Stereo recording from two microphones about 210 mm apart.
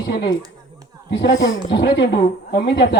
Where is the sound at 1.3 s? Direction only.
15° left (ahead or behind).